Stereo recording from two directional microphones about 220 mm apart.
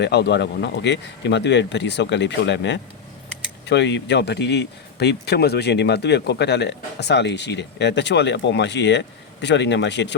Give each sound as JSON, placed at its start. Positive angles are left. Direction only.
{"t": 0.0, "sound": "speech", "side_deg": 50}